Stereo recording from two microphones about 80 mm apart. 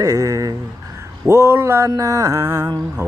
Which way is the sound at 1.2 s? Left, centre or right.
Right.